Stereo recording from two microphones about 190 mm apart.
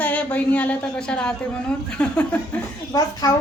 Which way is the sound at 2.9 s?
20° left (ahead or behind).